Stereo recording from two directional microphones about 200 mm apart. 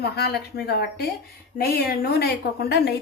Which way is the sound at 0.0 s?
55° left (ahead or behind).